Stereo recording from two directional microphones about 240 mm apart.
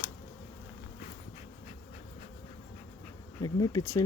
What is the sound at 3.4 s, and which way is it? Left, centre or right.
Speech, centre.